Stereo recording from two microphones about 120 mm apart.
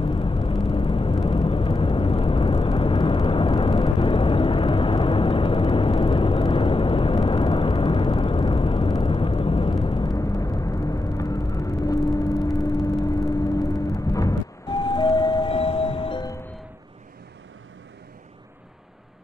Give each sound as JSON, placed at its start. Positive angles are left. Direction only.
{"t": 0.0, "sound": "vehicle", "side_deg": 45}